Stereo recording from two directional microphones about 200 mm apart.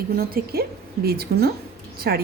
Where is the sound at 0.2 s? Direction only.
50° right (ahead or behind).